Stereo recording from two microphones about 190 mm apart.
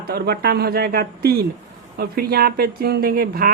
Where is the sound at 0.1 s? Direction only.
60° right (ahead or behind).